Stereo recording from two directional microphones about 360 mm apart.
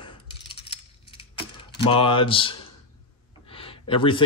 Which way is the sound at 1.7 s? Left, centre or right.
Centre.